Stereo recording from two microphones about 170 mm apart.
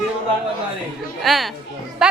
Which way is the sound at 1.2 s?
Centre (ahead or behind).